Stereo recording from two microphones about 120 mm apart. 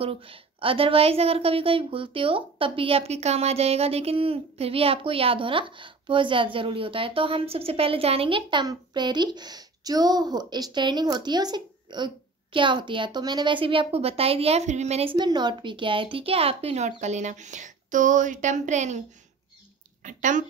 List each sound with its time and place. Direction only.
0.0 s a woman's voice: 50° right (ahead or behind)
15.1 s speech: 35° right (ahead or behind); by 19.0 s 80° right
20.0 s speech: 90° right